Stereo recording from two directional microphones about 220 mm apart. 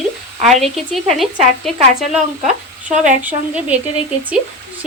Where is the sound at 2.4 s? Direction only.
35° right (ahead or behind).